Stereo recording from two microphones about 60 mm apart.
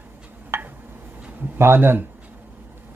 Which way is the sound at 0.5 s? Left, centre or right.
Right.